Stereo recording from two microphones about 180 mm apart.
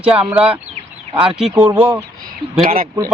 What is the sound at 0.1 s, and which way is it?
Speech, 10° right (ahead or behind).